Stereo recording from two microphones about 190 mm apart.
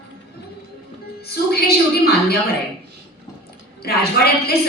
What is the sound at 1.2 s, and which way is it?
A woman's voice, 55° left (ahead or behind).